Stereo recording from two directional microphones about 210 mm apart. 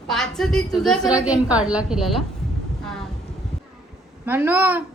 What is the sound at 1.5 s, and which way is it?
Speech, 5° right (ahead or behind).